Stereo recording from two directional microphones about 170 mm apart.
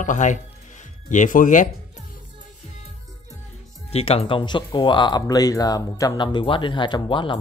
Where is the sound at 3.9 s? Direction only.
35° left (ahead or behind).